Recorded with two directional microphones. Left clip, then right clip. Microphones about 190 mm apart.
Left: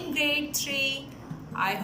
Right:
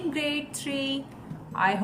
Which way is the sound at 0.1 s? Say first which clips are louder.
Left 8 dB; 65° right (ahead or behind).